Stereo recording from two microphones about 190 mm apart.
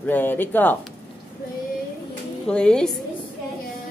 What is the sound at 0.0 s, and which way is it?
Speech, 10° left (ahead or behind).